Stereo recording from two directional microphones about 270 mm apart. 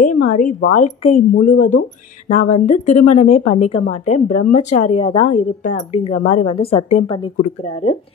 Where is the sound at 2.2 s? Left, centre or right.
Left.